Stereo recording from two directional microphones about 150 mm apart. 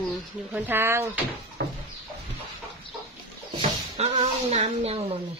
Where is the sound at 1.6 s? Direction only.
90° right.